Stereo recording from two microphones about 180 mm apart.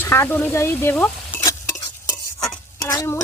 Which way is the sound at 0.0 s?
15° left (ahead or behind).